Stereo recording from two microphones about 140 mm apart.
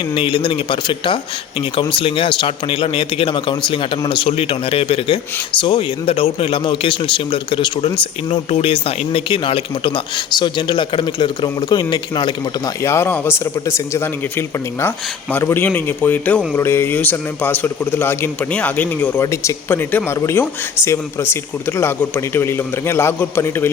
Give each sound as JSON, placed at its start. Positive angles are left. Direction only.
{"t": 0.1, "sound": "speech", "side_deg": 35}
{"t": 12.8, "sound": "speech", "side_deg": 20}
{"t": 19.2, "sound": "speech", "side_deg": 20}